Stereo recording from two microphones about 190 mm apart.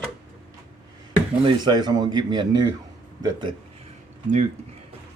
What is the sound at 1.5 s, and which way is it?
Speech, 20° right (ahead or behind).